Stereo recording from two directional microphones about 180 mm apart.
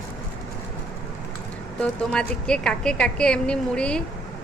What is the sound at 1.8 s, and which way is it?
A woman's voice, 5° left (ahead or behind).